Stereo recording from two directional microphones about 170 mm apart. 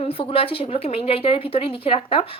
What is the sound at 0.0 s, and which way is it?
Speech, 35° left (ahead or behind).